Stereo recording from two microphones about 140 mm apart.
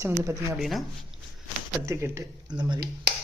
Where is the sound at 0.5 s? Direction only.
Centre (ahead or behind).